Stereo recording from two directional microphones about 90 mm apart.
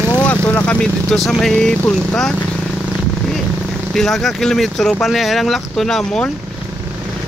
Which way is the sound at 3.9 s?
5° left (ahead or behind).